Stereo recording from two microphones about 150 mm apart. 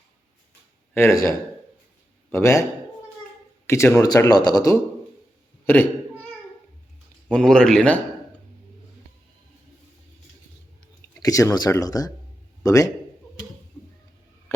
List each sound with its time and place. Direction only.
0.9 s speech: 20° left (ahead or behind)
2.3 s speech: 20° left (ahead or behind)
3.7 s speech: 20° left (ahead or behind)
5.6 s speech: 10° left (ahead or behind)
7.3 s speech: 5° left (ahead or behind)
11.1 s speech: 20° left (ahead or behind)